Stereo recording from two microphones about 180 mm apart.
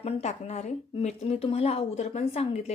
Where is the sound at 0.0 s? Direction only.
40° left (ahead or behind).